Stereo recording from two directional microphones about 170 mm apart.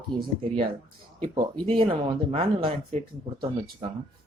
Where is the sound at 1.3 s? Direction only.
30° right (ahead or behind).